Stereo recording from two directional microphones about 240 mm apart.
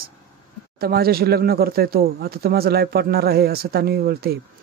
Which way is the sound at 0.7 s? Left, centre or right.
Right.